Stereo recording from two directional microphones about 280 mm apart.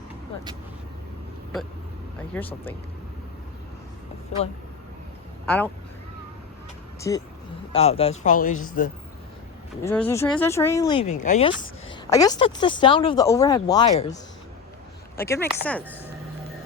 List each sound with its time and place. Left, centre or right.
2.3 s speech: centre
5.5 s speech: centre
7.1 s speech: centre; by 8.9 s left
9.8 s speech: centre; by 11.5 s left
11.9 s speech: centre
15.2 s speech: centre